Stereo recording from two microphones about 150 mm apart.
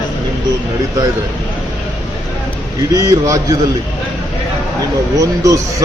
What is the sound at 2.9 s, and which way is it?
Speech, 20° right (ahead or behind).